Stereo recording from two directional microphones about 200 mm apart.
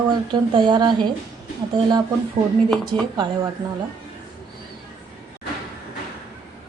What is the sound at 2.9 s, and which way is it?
Speech, 20° right (ahead or behind).